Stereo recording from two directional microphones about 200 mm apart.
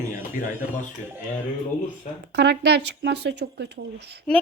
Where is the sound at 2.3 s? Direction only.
55° right (ahead or behind).